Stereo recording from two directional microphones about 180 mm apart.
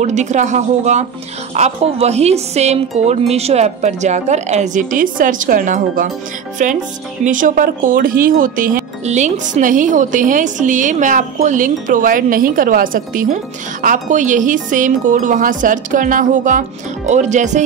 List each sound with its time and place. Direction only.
0.0 s speech: 40° right (ahead or behind)